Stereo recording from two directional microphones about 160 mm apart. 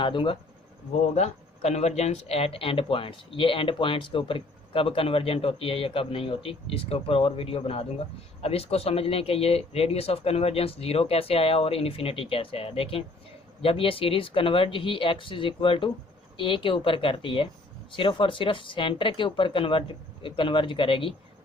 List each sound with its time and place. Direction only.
0.0 s speech: 30° left (ahead or behind)
1.1 s speech: 45° left (ahead or behind)